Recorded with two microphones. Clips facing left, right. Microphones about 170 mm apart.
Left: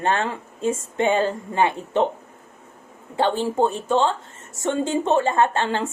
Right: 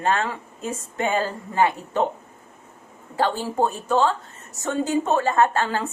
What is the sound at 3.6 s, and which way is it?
Speech, 25° left (ahead or behind).